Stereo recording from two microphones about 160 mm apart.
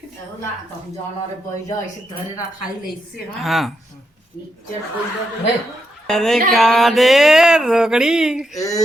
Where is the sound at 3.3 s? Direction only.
Centre (ahead or behind).